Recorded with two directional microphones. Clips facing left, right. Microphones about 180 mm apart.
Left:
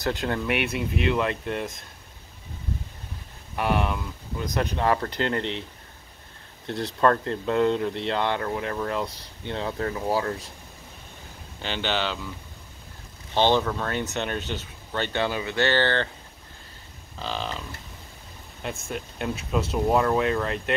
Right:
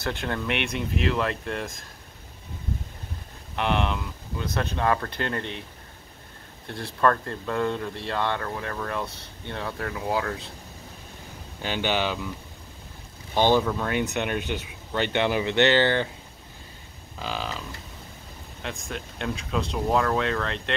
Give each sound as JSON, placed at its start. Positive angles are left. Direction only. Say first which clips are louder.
{"t": 0.0, "sound": "speech", "louder": "left 3 dB", "side_deg": 10}
{"t": 3.5, "sound": "speech", "louder": "left 1 dB", "side_deg": 5}
{"t": 7.0, "sound": "speech", "louder": "left 1 dB", "side_deg": 25}
{"t": 9.9, "sound": "speech", "louder": "even", "side_deg": 5}
{"t": 11.6, "sound": "speech", "louder": "right 2 dB", "side_deg": -10}
{"t": 13.3, "sound": "speech", "louder": "right 1 dB", "side_deg": -10}
{"t": 17.2, "sound": "speech", "louder": "even", "side_deg": -5}